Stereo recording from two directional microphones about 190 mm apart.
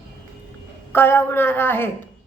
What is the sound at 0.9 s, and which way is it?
A woman's voice, 10° left (ahead or behind).